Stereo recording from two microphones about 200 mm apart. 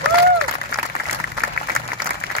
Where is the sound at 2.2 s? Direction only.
55° left (ahead or behind).